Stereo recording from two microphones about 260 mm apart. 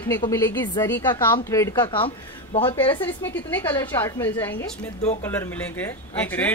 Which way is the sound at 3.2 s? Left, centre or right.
Centre.